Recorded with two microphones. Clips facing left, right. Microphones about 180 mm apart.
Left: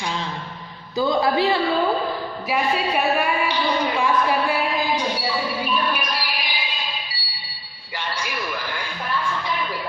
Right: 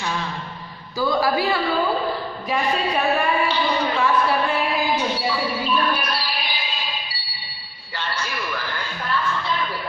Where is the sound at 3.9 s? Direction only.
15° left (ahead or behind).